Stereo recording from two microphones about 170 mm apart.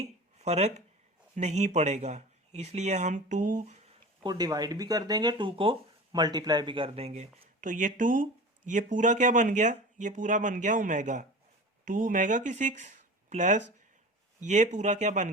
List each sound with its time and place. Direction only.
0.0 s a sound: 40° right (ahead or behind)
1.4 s speech: 40° right (ahead or behind)
4.2 s speech: 25° right (ahead or behind); by 15.3 s 45° right (ahead or behind)